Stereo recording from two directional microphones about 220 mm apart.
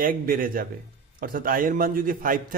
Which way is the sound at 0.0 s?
40° right (ahead or behind).